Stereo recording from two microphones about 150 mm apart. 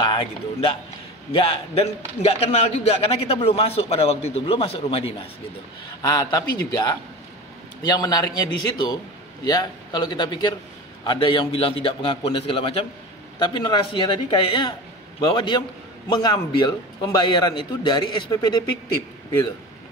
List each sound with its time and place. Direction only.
0.0 s a man's voice: 30° left (ahead or behind)
6.0 s a man's voice: 25° left (ahead or behind)